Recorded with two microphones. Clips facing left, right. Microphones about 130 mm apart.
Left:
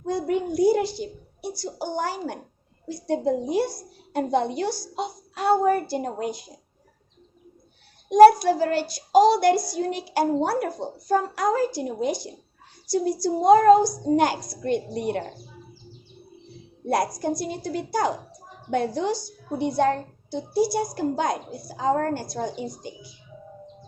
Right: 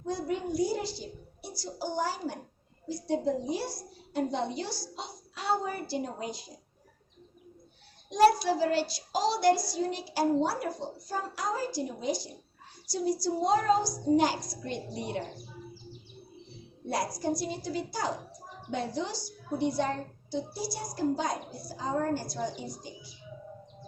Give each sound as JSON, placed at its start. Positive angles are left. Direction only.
{"t": 0.0, "sound": "a child's voice", "side_deg": 60}
{"t": 8.1, "sound": "a woman's voice", "side_deg": 50}
{"t": 17.4, "sound": "a child's voice", "side_deg": 60}